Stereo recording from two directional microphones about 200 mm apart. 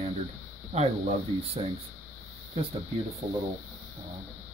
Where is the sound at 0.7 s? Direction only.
30° right (ahead or behind).